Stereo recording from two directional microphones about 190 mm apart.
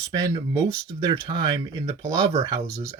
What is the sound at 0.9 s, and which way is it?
Speech, 25° right (ahead or behind).